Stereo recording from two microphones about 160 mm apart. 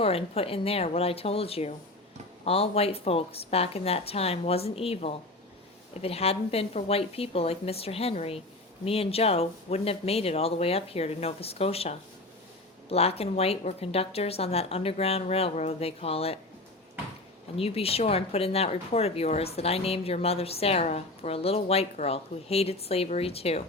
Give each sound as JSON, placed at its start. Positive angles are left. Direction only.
{"t": 0.0, "sound": "speech", "side_deg": 35}
{"t": 17.6, "sound": "speech", "side_deg": 40}